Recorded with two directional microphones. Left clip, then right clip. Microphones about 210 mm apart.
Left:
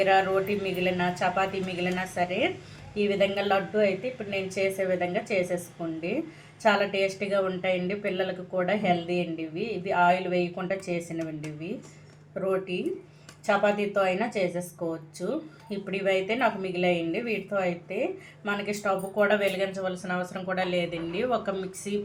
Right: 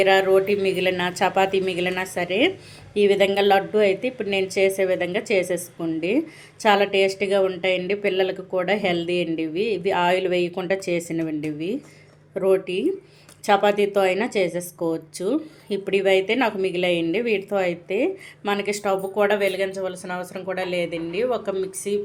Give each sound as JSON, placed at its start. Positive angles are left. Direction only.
{"t": 0.0, "sound": "a woman's voice", "side_deg": -40}
{"t": 6.6, "sound": "a woman's voice", "side_deg": -45}
{"t": 12.3, "sound": "a woman's voice", "side_deg": -45}